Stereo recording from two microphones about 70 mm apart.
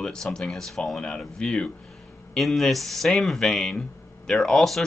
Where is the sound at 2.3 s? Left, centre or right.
Centre.